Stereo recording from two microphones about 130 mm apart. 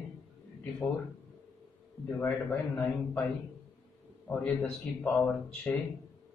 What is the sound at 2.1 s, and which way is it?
A man's voice, 15° left (ahead or behind).